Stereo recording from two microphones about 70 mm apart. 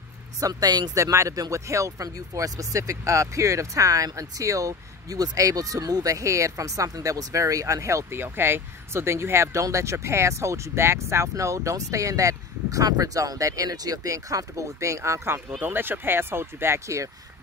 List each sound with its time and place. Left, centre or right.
0.4 s speech: right
0.9 s speech: right
15.6 s speech: right